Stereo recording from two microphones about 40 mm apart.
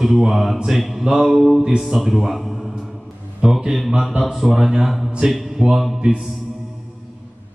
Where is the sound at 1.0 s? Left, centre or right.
Centre.